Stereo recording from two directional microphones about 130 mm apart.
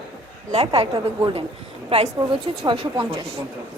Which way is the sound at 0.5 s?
50° right (ahead or behind).